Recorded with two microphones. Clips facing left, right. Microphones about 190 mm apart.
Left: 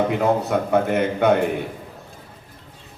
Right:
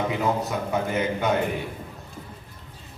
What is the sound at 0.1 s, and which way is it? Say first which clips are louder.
A man's voice: left 6 dB; 60° left (ahead or behind).